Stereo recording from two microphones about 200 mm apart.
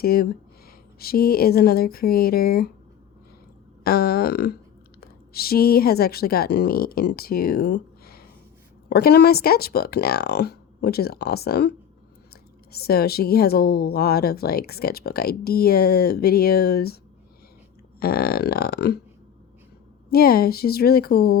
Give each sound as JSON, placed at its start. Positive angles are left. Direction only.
{"t": 0.0, "sound": "a woman's voice", "side_deg": 50}
{"t": 3.8, "sound": "a woman's voice", "side_deg": 50}
{"t": 18.0, "sound": "a woman's voice", "side_deg": 50}
{"t": 20.1, "sound": "a woman's voice", "side_deg": 50}